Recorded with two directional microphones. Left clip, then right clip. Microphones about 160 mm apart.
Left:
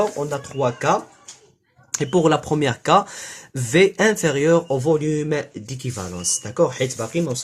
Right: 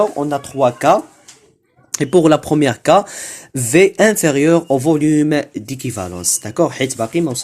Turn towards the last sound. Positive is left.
turn(degrees=-45)  # may be behind; listen again after turning